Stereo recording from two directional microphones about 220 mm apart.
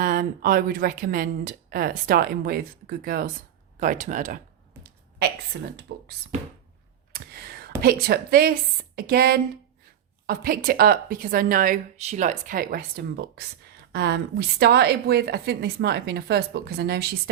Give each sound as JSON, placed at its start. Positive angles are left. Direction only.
{"t": 0.0, "sound": "a woman's voice", "side_deg": -40}
{"t": 5.5, "sound": "a woman's voice", "side_deg": -50}
{"t": 7.1, "sound": "a sound", "side_deg": -45}
{"t": 7.8, "sound": "a woman's voice", "side_deg": -45}